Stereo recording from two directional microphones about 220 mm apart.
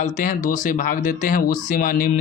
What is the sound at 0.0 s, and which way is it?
Speech, 35° left (ahead or behind).